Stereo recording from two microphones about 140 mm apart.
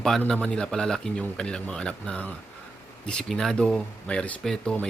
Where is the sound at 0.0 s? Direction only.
5° left (ahead or behind).